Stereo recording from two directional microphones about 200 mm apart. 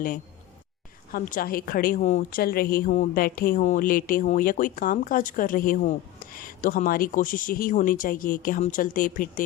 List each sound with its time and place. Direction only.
1.1 s a woman's voice: 45° left (ahead or behind)